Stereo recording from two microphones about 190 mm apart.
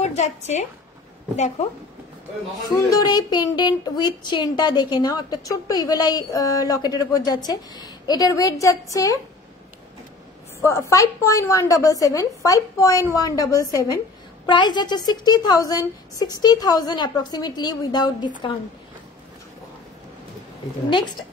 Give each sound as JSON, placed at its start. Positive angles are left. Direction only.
{"t": 0.0, "sound": "a woman's voice", "side_deg": 35}
{"t": 2.7, "sound": "speech", "side_deg": 20}
{"t": 10.6, "sound": "a woman's voice", "side_deg": 15}